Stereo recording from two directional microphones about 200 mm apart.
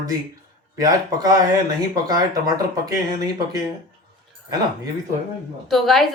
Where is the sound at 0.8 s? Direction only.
20° right (ahead or behind).